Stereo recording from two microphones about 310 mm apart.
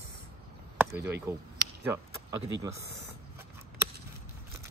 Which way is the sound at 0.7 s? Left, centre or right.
Centre.